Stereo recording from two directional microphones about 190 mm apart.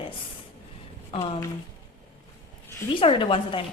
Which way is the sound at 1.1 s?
35° left (ahead or behind).